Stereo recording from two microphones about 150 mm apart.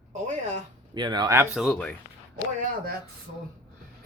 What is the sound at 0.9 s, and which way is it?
Speech, 30° right (ahead or behind).